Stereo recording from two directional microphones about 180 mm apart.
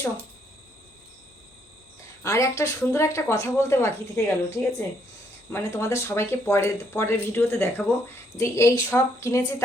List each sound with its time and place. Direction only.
2.2 s speech: 15° left (ahead or behind)